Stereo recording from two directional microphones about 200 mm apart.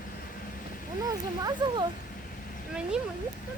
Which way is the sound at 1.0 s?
20° right (ahead or behind).